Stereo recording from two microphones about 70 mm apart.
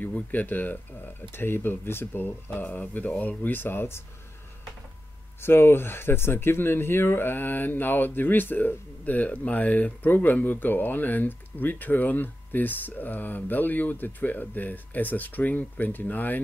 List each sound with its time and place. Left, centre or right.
0.0 s speech: left
5.4 s speech: left